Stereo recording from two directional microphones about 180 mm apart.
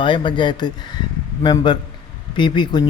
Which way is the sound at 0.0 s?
25° left (ahead or behind).